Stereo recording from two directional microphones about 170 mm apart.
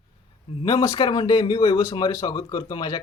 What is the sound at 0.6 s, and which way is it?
Speech, 25° left (ahead or behind).